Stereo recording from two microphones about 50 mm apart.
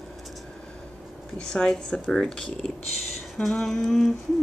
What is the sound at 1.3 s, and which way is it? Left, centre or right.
Speech, centre.